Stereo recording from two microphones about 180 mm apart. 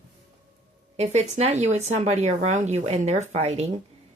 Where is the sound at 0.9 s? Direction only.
40° right (ahead or behind).